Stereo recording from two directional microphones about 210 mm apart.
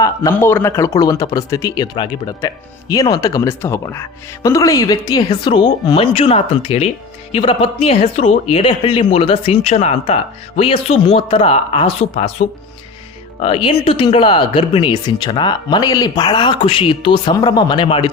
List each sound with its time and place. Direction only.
0.0 s speech: 15° left (ahead or behind)